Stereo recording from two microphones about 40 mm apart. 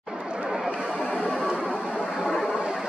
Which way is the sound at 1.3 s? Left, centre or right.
Right.